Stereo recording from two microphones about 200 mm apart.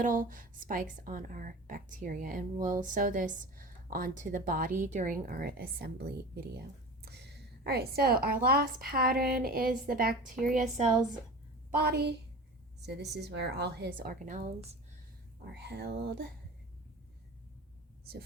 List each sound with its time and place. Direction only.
0.0 s a woman's voice: 40° right (ahead or behind)
11.8 s a woman's voice: 55° right (ahead or behind)
15.5 s a woman's voice: 55° right (ahead or behind)